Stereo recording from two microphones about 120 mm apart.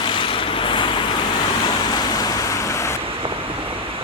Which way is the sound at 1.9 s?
30° left (ahead or behind).